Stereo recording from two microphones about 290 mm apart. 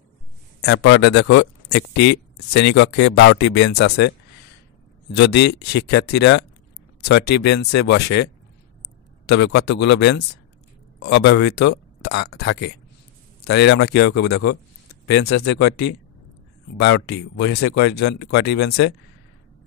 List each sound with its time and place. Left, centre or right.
0.6 s speech: left
5.1 s speech: left